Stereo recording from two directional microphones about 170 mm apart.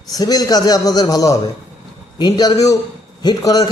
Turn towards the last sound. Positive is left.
turn(degrees=20)  # may be behind; listen again after turning